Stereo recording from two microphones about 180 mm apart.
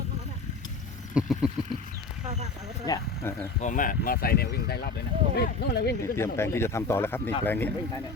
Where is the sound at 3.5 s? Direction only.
45° left (ahead or behind); by 5.9 s 65° left (ahead or behind).